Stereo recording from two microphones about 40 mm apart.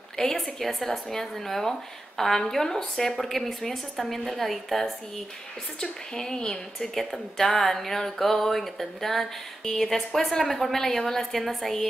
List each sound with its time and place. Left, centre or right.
0.2 s a woman's voice: centre
0.6 s a woman's voice: centre
5.8 s a woman's voice: centre